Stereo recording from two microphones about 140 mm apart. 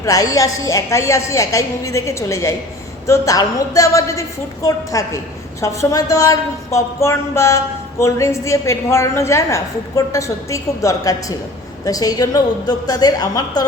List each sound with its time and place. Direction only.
0.0 s a woman's voice: 25° left (ahead or behind)